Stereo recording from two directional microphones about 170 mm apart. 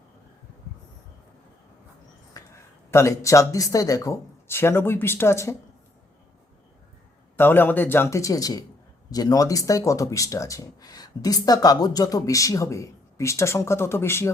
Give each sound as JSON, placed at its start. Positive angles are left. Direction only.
{"t": 2.3, "sound": "speech", "side_deg": 15}
{"t": 7.3, "sound": "speech", "side_deg": 10}